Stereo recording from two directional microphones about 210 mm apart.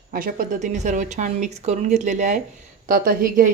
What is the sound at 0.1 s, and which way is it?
A woman's voice, 40° right (ahead or behind).